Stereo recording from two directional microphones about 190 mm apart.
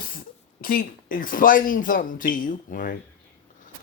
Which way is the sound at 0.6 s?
50° left (ahead or behind).